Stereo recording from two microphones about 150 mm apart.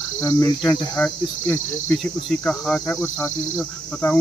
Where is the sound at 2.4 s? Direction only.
5° left (ahead or behind).